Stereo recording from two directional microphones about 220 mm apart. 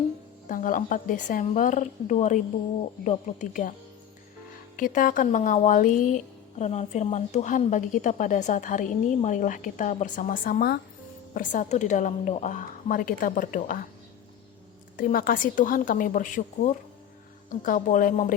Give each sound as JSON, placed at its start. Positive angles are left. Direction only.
{"t": 0.4, "sound": "speech", "side_deg": 40}
{"t": 4.8, "sound": "speech", "side_deg": 35}
{"t": 14.9, "sound": "speech", "side_deg": 40}